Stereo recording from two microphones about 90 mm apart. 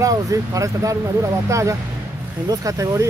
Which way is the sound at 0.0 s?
40° right (ahead or behind).